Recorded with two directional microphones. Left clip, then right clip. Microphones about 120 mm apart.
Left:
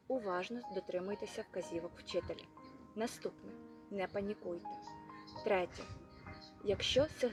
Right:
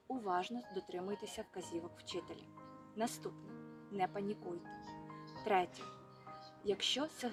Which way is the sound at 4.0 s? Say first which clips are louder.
Right 1 dB; 45° right (ahead or behind).